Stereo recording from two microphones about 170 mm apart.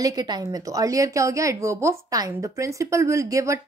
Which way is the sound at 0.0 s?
25° right (ahead or behind).